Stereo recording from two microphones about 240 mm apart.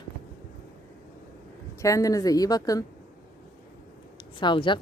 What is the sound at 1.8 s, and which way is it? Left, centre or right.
Speech, centre.